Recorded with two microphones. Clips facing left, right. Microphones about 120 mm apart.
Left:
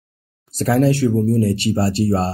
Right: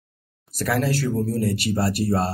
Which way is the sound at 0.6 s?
25° left (ahead or behind).